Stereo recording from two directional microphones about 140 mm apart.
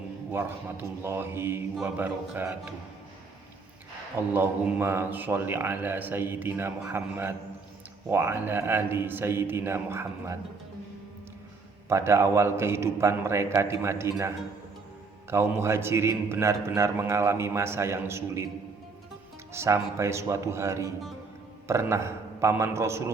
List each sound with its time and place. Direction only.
0.3 s a man's voice: 15° right (ahead or behind)
4.4 s a man's voice: 15° right (ahead or behind)
11.9 s a man's voice: 20° right (ahead or behind)
19.5 s a man's voice: 20° right (ahead or behind)